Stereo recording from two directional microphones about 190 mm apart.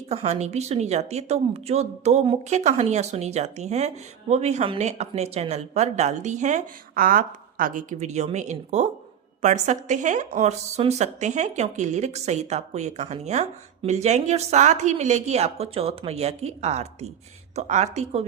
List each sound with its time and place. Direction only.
0.1 s a woman's voice: 35° right (ahead or behind)